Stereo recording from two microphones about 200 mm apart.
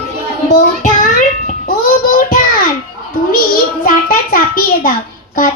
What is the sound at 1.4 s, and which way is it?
Music, 45° left (ahead or behind).